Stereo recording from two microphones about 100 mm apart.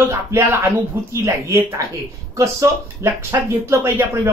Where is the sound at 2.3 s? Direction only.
30° right (ahead or behind).